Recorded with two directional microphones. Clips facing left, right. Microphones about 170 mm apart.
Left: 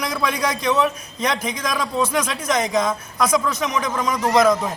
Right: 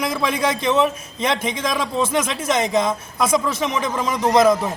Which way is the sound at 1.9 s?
25° right (ahead or behind).